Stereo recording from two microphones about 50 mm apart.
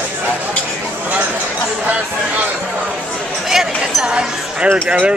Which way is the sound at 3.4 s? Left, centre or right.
Centre.